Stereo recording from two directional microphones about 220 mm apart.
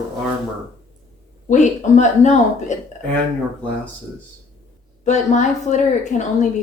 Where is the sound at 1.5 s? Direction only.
35° left (ahead or behind).